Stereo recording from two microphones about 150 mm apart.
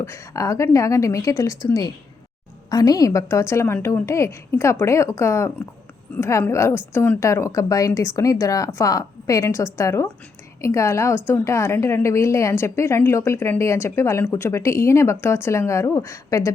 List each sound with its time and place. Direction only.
0.0 s a woman's voice: 20° left (ahead or behind)